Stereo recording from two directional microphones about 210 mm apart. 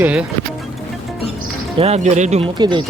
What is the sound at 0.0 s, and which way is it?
Speech, 5° right (ahead or behind).